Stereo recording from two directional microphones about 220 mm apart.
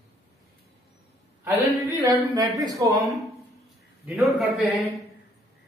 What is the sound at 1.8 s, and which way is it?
Speech, 15° right (ahead or behind).